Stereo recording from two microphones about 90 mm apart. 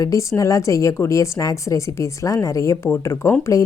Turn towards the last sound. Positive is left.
turn(degrees=30)  # may be behind; listen again after turning